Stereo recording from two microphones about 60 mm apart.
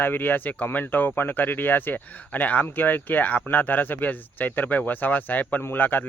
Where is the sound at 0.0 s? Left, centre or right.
Left.